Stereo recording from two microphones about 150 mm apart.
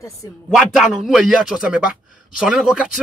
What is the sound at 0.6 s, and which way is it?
Speech, centre (ahead or behind).